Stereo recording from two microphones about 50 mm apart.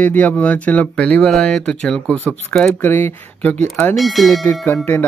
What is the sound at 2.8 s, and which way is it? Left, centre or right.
Speech, left.